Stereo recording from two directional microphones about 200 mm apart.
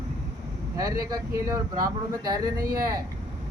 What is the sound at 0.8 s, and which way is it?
Speech, 20° right (ahead or behind).